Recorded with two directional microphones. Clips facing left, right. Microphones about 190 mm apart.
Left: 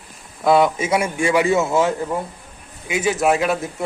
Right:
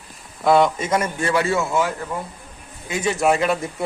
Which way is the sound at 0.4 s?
5° left (ahead or behind).